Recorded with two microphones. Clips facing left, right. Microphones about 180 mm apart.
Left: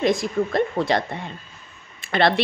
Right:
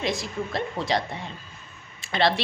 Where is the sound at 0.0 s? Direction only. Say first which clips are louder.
Left 8 dB; 50° left (ahead or behind).